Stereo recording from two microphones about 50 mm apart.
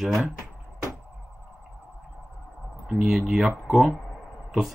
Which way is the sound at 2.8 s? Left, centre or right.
Centre.